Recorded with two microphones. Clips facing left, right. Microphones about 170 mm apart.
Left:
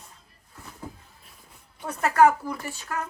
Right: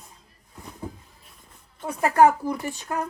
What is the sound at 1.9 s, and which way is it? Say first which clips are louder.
Speech: right 1 dB; 15° right (ahead or behind).